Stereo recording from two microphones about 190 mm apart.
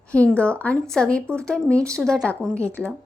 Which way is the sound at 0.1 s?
5° left (ahead or behind).